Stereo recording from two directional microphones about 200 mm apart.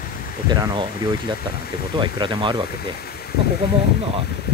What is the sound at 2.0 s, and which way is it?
Speech, 25° right (ahead or behind).